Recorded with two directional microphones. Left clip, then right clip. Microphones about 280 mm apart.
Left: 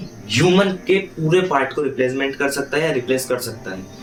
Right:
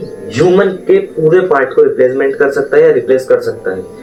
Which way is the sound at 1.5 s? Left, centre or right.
Left.